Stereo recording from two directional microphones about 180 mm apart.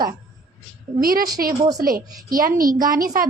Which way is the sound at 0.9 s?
55° right (ahead or behind).